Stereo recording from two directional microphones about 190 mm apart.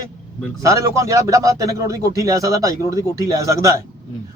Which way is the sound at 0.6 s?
15° right (ahead or behind).